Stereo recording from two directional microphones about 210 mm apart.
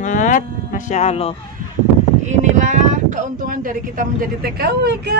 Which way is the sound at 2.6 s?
35° right (ahead or behind).